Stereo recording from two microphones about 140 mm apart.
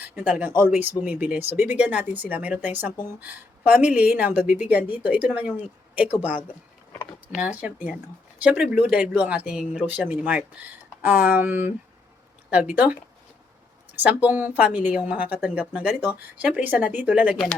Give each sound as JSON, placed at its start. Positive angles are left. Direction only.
{"t": 0.0, "sound": "a woman's voice", "side_deg": -10}
{"t": 7.6, "sound": "a woman's voice", "side_deg": -10}
{"t": 14.0, "sound": "a woman's voice", "side_deg": -10}